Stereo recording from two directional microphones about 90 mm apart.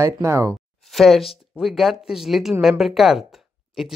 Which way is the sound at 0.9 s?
Centre (ahead or behind).